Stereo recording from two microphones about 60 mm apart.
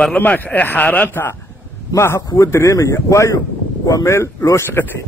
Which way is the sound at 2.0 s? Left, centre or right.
Left.